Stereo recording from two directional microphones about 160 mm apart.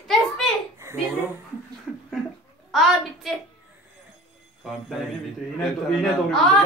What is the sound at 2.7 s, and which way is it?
Speech, centre (ahead or behind).